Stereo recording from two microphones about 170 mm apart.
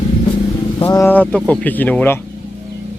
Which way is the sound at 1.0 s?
10° left (ahead or behind).